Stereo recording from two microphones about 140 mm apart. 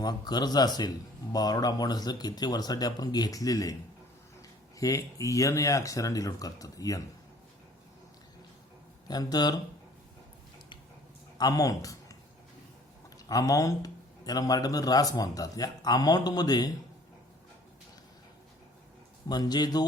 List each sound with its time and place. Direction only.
0.0 s a man's voice: 30° left (ahead or behind)
4.8 s a man's voice: 25° left (ahead or behind)
9.0 s a man's voice: 30° left (ahead or behind)
11.3 s a man's voice: 25° left (ahead or behind)
13.1 s a man's voice: 25° left (ahead or behind)
19.3 s a man's voice: 30° left (ahead or behind)